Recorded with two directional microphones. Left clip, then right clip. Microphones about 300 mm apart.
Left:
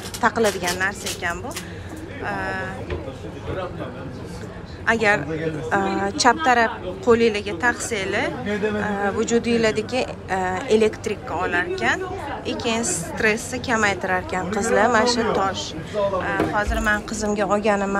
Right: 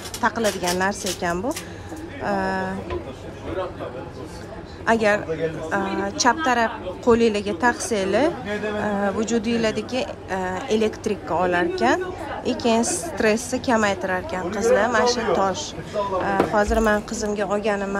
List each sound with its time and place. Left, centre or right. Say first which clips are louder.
0.2 s a woman's voice: left 2 dB; centre
4.8 s a woman's voice: even; centre